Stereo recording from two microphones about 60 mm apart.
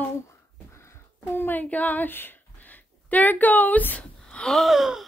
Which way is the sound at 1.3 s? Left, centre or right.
Left.